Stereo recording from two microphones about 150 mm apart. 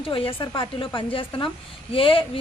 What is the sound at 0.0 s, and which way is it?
A woman's voice, 35° left (ahead or behind).